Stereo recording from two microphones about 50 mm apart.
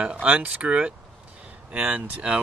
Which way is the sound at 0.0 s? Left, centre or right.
Right.